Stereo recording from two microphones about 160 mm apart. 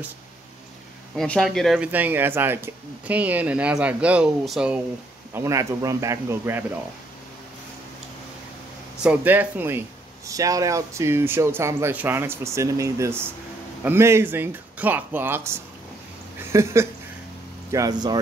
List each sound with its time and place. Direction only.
1.1 s speech: 5° left (ahead or behind)
1.9 s speech: 10° right (ahead or behind)
5.3 s speech: 20° right (ahead or behind)
9.0 s speech: 10° right (ahead or behind)